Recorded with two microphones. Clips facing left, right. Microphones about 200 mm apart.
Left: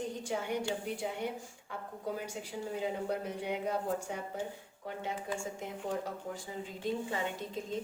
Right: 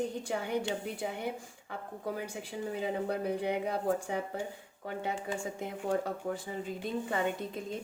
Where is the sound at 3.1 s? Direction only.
60° right (ahead or behind).